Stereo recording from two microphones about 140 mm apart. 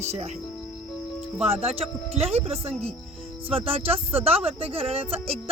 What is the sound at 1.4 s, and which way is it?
Speech, 50° right (ahead or behind).